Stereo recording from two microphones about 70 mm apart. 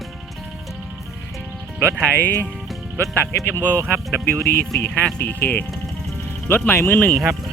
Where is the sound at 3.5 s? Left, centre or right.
Left.